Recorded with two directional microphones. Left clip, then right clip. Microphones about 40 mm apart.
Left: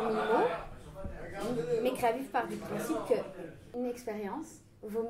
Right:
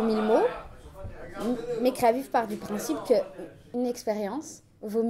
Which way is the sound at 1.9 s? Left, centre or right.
Right.